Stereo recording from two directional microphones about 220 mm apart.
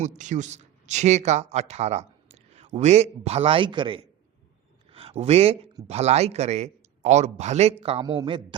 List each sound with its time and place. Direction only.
0.0 s a man's voice: 35° right (ahead or behind)